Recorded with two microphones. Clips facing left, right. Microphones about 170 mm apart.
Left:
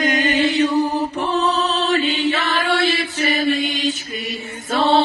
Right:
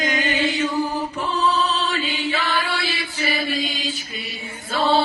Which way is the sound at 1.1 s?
70° left (ahead or behind).